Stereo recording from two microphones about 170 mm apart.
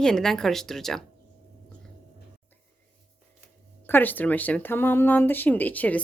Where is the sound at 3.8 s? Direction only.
10° left (ahead or behind).